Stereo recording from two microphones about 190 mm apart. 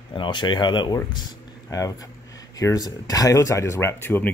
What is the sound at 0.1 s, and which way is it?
Speech, 25° left (ahead or behind).